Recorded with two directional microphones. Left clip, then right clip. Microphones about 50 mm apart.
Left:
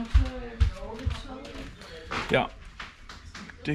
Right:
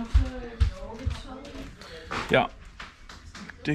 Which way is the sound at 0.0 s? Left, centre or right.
Centre.